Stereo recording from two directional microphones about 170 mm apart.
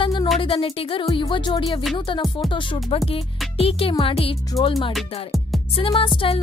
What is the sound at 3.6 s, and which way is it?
Speech, 35° left (ahead or behind).